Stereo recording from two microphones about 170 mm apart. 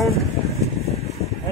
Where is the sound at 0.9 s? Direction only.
40° left (ahead or behind).